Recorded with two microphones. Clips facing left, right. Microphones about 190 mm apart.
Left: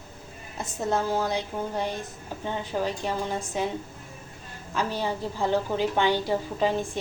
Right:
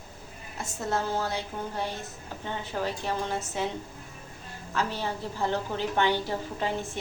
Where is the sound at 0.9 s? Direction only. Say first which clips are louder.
Left 3 dB; 15° left (ahead or behind).